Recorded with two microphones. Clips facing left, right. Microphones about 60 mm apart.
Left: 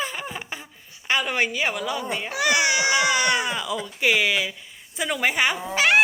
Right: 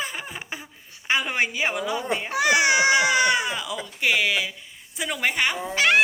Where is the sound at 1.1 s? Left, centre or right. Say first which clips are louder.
Left 1 dB; centre.